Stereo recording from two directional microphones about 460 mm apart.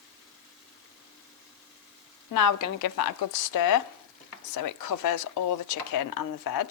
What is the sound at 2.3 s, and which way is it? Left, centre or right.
Speech, left.